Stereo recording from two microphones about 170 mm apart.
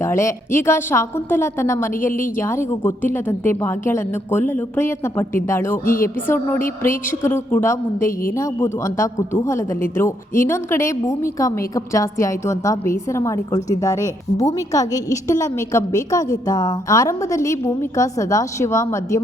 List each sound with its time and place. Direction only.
0.0 s a woman's voice: 15° left (ahead or behind)
5.8 s speech: 55° left (ahead or behind)
6.2 s a woman's voice: 15° left (ahead or behind)